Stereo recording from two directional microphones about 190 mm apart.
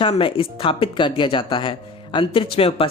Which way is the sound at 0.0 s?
30° left (ahead or behind).